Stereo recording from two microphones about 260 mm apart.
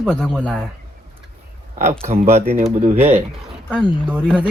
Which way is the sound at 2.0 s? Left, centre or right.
Right.